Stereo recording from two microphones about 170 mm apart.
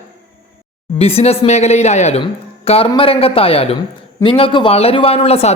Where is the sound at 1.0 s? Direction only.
35° left (ahead or behind).